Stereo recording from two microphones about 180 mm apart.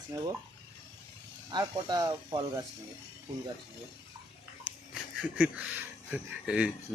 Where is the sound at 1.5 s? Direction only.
20° right (ahead or behind).